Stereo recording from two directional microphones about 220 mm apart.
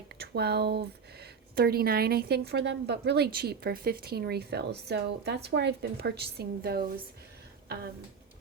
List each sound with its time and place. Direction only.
0.2 s speech: 45° right (ahead or behind)